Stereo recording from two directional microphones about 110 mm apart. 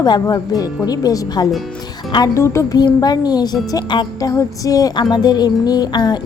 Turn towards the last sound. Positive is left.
turn(degrees=40)  # may be behind; listen again after turning